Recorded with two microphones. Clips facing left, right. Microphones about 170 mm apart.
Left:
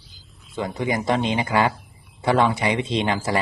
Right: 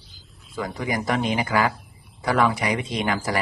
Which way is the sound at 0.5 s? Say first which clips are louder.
Left 3 dB; 25° left (ahead or behind).